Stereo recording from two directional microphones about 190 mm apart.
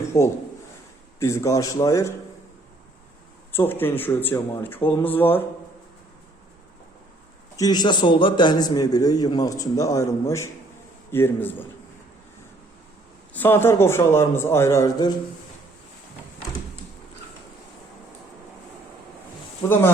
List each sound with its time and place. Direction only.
0.1 s speech: 15° left (ahead or behind)
3.5 s speech: 10° left (ahead or behind)
7.5 s a man's voice: 20° left (ahead or behind)
13.3 s speech: 10° left (ahead or behind)
19.6 s speech: 10° left (ahead or behind)